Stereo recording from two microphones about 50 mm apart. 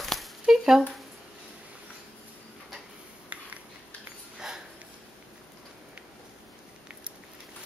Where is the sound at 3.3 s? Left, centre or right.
Right.